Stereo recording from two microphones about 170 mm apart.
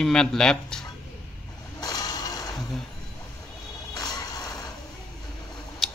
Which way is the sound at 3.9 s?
20° left (ahead or behind).